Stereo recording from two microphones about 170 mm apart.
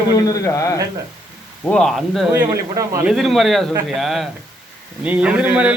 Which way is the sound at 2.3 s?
15° right (ahead or behind).